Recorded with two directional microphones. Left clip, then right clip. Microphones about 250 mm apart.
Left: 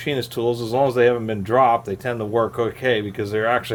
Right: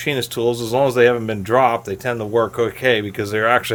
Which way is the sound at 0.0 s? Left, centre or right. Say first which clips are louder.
Right 3 dB; right.